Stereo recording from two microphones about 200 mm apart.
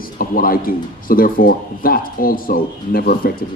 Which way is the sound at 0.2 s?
45° left (ahead or behind).